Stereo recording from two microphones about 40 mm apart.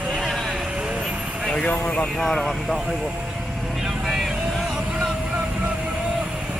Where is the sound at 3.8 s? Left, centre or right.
Centre.